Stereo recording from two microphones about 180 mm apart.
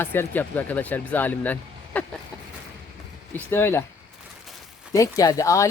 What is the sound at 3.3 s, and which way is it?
Speech, 15° left (ahead or behind).